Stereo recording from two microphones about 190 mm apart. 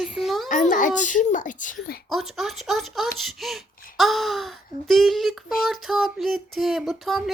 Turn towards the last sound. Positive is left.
turn(degrees=0)  # may be behind; listen again after turning